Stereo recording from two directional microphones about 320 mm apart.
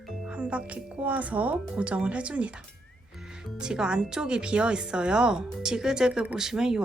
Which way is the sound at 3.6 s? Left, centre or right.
Centre.